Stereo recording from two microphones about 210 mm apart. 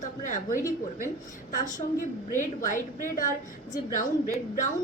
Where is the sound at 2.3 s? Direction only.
40° left (ahead or behind).